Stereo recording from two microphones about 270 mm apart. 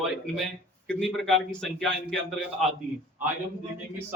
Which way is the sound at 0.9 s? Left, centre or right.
Centre.